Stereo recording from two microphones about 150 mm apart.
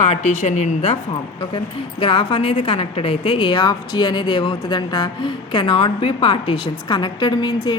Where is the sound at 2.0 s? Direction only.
35° left (ahead or behind).